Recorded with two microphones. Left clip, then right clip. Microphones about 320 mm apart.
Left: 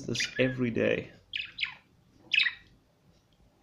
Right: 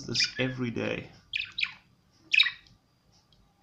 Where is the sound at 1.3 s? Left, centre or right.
Centre.